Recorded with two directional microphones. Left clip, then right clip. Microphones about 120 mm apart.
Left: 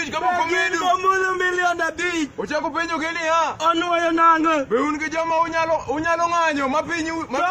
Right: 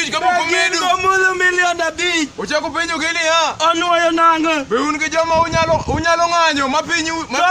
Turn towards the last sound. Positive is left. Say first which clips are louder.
# right 6 dB
turn(degrees=-15)  # may be behind; listen again after turning